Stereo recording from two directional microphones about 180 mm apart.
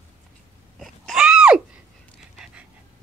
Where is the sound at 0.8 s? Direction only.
Centre (ahead or behind).